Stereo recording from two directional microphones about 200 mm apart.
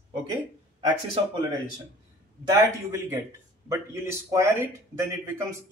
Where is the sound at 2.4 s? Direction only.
15° right (ahead or behind).